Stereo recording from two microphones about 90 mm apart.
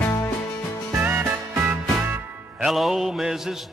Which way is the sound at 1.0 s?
20° right (ahead or behind).